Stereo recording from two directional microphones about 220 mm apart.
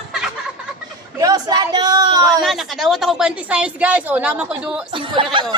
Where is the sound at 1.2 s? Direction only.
15° right (ahead or behind).